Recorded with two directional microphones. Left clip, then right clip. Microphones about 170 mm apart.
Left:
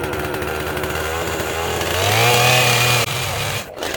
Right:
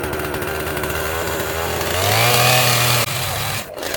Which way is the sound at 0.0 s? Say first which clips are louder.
Even; 5° right (ahead or behind).